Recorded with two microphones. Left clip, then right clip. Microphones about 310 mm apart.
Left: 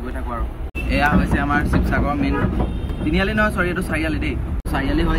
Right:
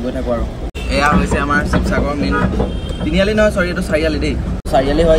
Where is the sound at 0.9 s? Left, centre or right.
Centre.